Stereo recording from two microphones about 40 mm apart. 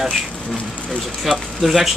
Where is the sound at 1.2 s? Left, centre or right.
Centre.